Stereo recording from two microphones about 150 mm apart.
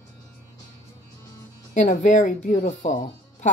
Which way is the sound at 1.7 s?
55° left (ahead or behind).